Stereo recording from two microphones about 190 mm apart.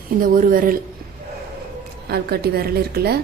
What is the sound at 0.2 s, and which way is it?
Speech, 45° right (ahead or behind).